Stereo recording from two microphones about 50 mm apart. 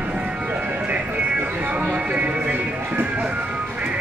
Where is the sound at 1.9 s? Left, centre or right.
Right.